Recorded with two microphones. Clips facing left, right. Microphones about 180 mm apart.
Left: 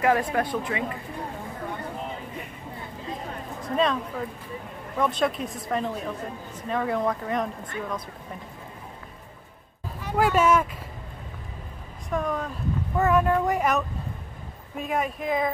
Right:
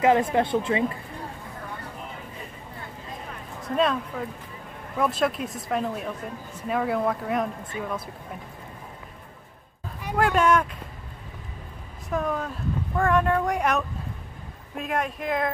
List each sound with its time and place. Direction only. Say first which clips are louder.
0.0 s a woman's voice: right 3 dB; 25° right (ahead or behind)
3.6 s speech: right 1 dB; centre (ahead or behind)
10.1 s speech: even; 5° left (ahead or behind)
12.1 s speech: even; centre (ahead or behind)